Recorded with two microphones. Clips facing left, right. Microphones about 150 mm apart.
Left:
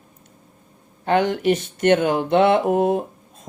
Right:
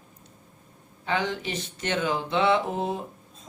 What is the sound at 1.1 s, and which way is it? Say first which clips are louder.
Speech: left 10 dB; 55° left (ahead or behind).